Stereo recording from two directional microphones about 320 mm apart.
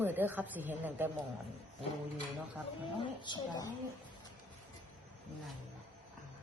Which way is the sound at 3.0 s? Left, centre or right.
Centre.